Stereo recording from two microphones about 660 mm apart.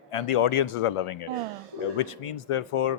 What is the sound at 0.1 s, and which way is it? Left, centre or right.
Speech, left.